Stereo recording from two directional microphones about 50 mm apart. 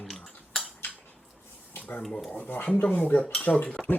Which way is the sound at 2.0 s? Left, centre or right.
Centre.